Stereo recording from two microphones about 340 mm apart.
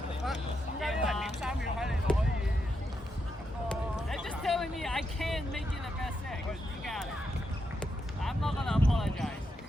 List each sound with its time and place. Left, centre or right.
0.8 s speech: centre
3.7 s a sound: centre
6.5 s speech: centre